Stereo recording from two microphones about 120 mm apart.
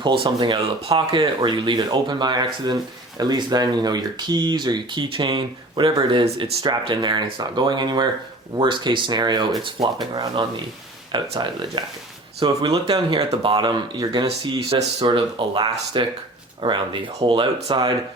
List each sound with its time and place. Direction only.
0.0 s speech: 40° right (ahead or behind)
16.6 s speech: 45° right (ahead or behind)